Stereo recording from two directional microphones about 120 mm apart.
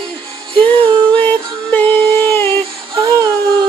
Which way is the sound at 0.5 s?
45° right (ahead or behind).